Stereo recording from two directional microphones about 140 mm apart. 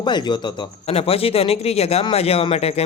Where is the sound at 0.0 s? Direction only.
30° left (ahead or behind).